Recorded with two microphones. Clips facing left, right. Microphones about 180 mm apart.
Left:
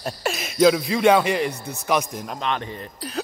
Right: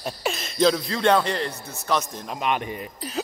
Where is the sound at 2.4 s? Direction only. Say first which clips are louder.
Right 2 dB; 15° right (ahead or behind).